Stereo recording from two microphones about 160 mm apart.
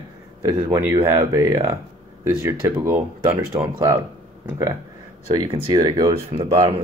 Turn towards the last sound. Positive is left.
turn(degrees=-30)  # may be behind; listen again after turning